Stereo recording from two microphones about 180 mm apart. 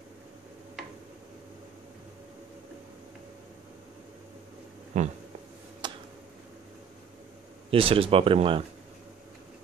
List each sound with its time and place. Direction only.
4.9 s speech: 40° right (ahead or behind)
5.8 s tick-tock: 25° right (ahead or behind)
7.7 s speech: 30° right (ahead or behind)